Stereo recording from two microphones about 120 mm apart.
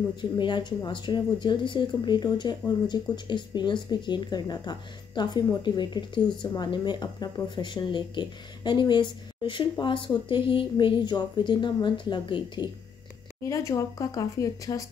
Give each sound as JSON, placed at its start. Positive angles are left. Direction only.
{"t": 0.1, "sound": "speech", "side_deg": 40}
{"t": 13.4, "sound": "speech", "side_deg": 25}